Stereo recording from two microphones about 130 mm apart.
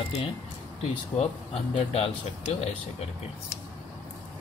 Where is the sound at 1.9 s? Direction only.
50° left (ahead or behind).